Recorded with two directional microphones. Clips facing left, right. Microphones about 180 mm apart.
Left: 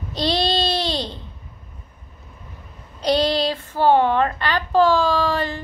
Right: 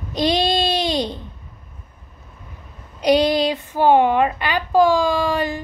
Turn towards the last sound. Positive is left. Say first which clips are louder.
# right 1 dB
turn(degrees=-15)  # may be behind; listen again after turning